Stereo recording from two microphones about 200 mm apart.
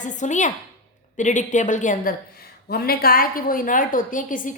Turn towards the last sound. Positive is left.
turn(degrees=40)  # may be behind; listen again after turning